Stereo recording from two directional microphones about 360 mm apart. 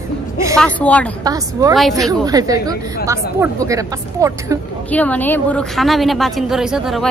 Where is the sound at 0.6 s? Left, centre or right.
Centre.